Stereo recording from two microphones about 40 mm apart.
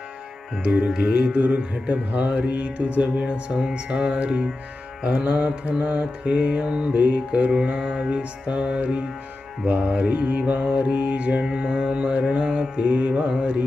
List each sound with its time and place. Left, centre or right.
0.5 s music: right
1.4 s music: right
5.4 s music: right
8.2 s music: right
11.4 s music: centre